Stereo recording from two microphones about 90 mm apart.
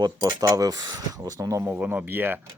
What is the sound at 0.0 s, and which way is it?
Speech, 50° right (ahead or behind).